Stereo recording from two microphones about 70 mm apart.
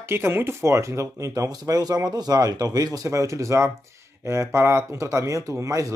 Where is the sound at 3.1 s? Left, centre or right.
Right.